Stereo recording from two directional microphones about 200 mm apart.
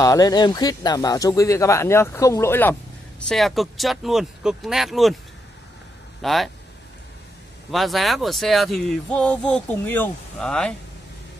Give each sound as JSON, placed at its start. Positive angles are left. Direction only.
{"t": 0.0, "sound": "speech", "side_deg": 20}
{"t": 6.2, "sound": "speech", "side_deg": 0}
{"t": 7.7, "sound": "speech", "side_deg": 0}